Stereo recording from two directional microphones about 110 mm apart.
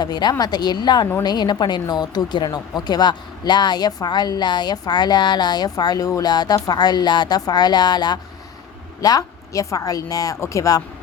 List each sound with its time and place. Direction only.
0.0 s speech: 40° left (ahead or behind)